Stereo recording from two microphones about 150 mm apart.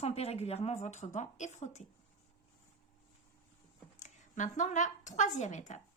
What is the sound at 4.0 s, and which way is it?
A woman's voice, 55° left (ahead or behind).